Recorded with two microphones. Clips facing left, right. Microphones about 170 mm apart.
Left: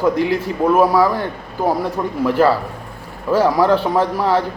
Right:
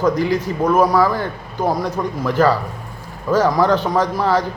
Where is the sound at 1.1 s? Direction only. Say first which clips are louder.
Left 1 dB; 35° left (ahead or behind).